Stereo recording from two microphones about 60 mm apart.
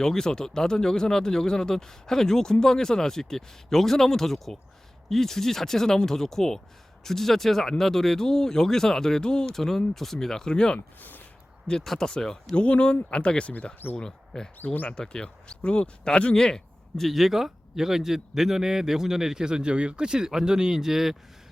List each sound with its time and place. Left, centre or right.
0.0 s speech: centre
10.8 s speech: left
11.7 s speech: centre
14.6 s speech: left
14.9 s speech: centre
17.0 s a man's voice: centre